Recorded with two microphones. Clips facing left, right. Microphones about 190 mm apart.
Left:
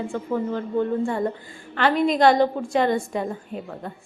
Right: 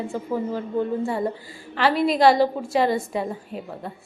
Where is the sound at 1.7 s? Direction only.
5° right (ahead or behind).